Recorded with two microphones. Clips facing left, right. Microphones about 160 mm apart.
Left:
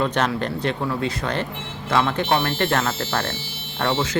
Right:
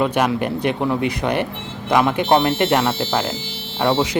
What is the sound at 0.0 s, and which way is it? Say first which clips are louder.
Speech: right 4 dB; 15° right (ahead or behind).